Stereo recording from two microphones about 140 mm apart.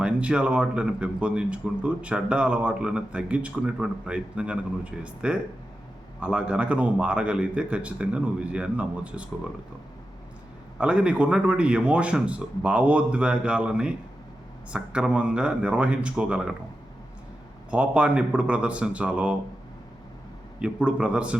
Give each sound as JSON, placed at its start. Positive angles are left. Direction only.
{"t": 0.0, "sound": "speech", "side_deg": -5}
{"t": 10.8, "sound": "speech", "side_deg": -10}
{"t": 17.7, "sound": "speech", "side_deg": -10}
{"t": 20.6, "sound": "speech", "side_deg": -10}